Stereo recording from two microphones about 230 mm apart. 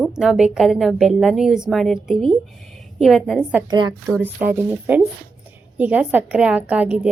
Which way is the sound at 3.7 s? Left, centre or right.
Centre.